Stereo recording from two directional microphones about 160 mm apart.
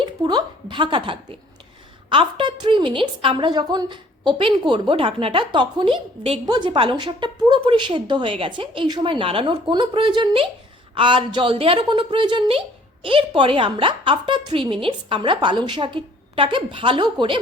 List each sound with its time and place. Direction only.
0.0 s a woman's voice: 25° right (ahead or behind)